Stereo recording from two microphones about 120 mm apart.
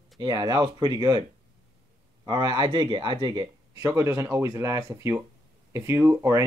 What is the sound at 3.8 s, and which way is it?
Speech, 25° right (ahead or behind).